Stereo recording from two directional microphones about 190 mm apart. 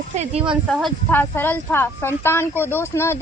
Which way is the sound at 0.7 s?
5° right (ahead or behind).